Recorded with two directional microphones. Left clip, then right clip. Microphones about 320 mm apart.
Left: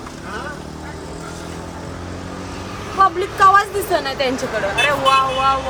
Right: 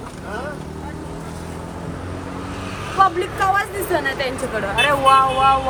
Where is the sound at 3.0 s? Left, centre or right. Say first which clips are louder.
Left 4 dB; centre.